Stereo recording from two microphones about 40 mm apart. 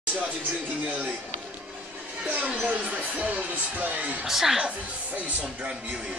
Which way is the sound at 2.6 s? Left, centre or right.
Right.